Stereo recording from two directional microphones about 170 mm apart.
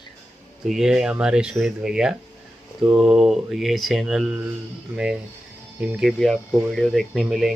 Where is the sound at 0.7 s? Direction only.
Centre (ahead or behind).